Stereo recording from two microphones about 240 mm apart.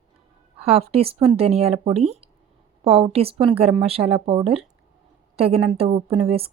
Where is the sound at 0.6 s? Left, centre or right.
Right.